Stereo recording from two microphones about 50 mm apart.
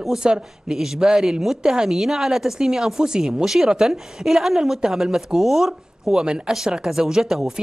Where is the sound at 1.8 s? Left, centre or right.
Centre.